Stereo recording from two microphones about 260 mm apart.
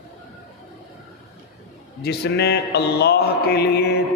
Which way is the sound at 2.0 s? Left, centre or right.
Left.